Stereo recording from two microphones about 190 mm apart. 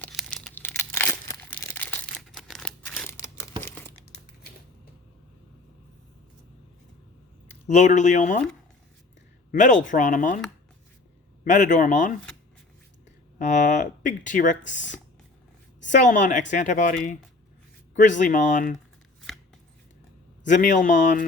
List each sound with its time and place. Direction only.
0.0 s crumpling: 5° left (ahead or behind)
7.7 s speech: 40° left (ahead or behind)
9.5 s speech: 40° left (ahead or behind)
11.4 s speech: 40° left (ahead or behind)
13.4 s speech: 40° left (ahead or behind)
20.4 s speech: 40° left (ahead or behind)